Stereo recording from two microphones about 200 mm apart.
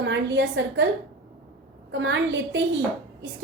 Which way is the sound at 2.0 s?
65° right (ahead or behind).